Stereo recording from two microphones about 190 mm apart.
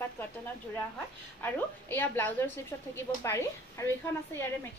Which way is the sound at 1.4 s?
10° left (ahead or behind).